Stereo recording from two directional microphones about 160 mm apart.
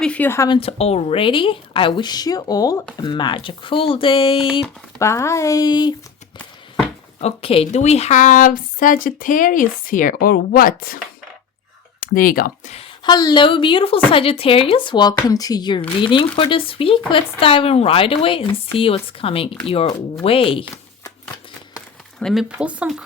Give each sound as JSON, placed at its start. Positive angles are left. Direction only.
{"t": 0.0, "sound": "a sound", "side_deg": 10}
{"t": 0.4, "sound": "a woman's voice", "side_deg": 35}
{"t": 4.9, "sound": "speech", "side_deg": 20}
{"t": 7.2, "sound": "a woman's voice", "side_deg": 40}
{"t": 12.7, "sound": "a woman's voice", "side_deg": 30}
{"t": 22.2, "sound": "speech", "side_deg": 0}